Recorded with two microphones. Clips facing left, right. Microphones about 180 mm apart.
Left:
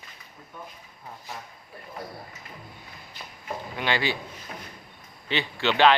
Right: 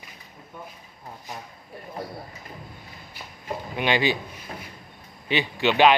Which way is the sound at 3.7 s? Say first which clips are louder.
Right 4 dB; 15° right (ahead or behind).